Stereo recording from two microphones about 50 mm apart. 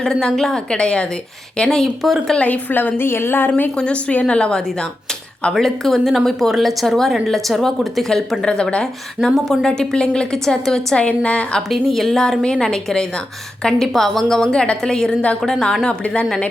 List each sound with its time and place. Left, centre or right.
0.0 s a woman's voice: centre
2.0 s speech: centre
2.4 s a woman's voice: left
3.8 s a woman's voice: left
5.5 s speech: centre
9.3 s speech: centre
9.6 s speech: centre
11.0 s a woman's voice: left
11.7 s speech: centre
15.9 s a woman's voice: left